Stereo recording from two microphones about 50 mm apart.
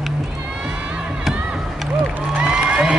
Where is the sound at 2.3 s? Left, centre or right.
Centre.